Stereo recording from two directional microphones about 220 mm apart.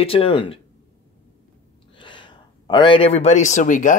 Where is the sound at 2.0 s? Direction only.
20° left (ahead or behind).